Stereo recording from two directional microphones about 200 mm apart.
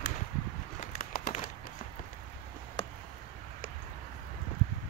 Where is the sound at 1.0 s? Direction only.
45° left (ahead or behind).